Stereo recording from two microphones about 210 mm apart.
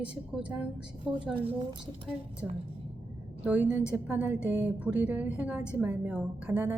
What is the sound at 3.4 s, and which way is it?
A woman's voice, 5° right (ahead or behind).